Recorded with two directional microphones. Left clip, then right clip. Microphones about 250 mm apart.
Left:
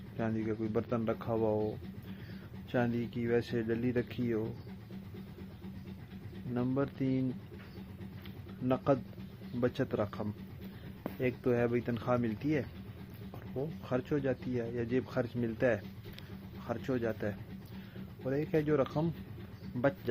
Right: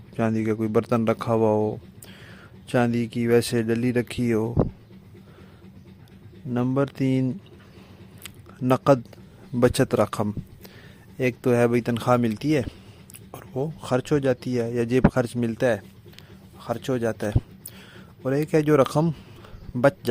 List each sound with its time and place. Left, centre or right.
0.2 s speech: right
6.5 s speech: right
8.2 s a sound: right
9.6 s speech: right